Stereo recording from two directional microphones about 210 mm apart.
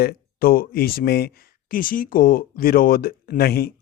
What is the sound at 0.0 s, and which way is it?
Speech, 45° left (ahead or behind).